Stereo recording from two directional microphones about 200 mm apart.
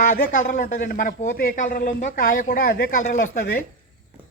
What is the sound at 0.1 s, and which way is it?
A man's voice, 40° left (ahead or behind).